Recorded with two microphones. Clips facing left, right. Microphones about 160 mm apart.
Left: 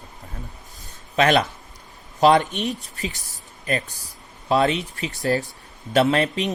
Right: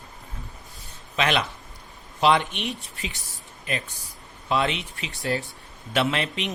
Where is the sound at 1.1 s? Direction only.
45° left (ahead or behind).